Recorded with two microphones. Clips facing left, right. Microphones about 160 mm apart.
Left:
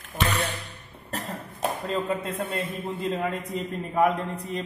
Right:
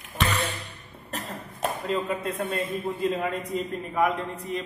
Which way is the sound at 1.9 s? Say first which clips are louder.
Even; 25° left (ahead or behind).